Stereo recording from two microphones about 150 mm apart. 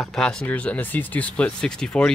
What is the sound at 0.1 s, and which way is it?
Speech, 5° left (ahead or behind).